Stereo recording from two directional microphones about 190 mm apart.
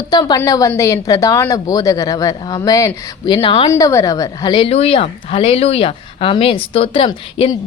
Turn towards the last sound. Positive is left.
turn(degrees=25)  # may be behind; listen again after turning